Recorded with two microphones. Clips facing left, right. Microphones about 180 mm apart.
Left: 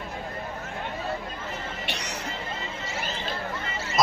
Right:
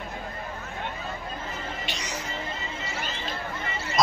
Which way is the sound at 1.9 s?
65° left (ahead or behind).